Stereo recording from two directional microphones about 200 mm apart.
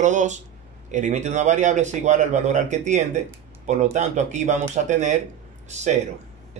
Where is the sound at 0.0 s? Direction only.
40° right (ahead or behind).